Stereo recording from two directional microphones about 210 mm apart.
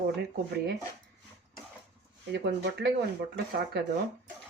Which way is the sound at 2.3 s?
55° right (ahead or behind).